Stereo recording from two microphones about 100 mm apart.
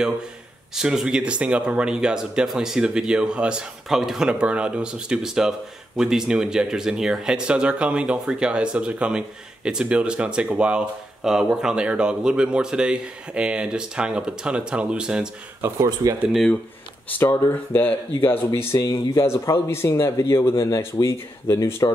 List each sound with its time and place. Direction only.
0.7 s speech: 5° right (ahead or behind)
15.6 s speech: 30° right (ahead or behind)
17.2 s a man's voice: 25° left (ahead or behind)